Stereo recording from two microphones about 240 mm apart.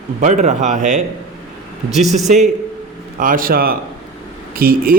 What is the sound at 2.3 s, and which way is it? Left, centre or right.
A man's voice, right.